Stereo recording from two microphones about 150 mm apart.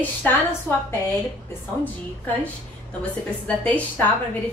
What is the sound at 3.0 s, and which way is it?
A woman's voice, 10° left (ahead or behind).